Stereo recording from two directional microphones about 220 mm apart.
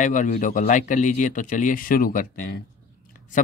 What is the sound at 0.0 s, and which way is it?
Speech, 35° left (ahead or behind).